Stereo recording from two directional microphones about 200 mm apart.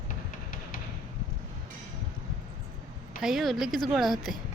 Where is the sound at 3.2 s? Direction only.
Centre (ahead or behind).